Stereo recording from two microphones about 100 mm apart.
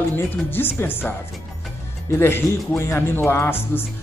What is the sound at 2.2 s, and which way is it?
A man's voice, 25° left (ahead or behind).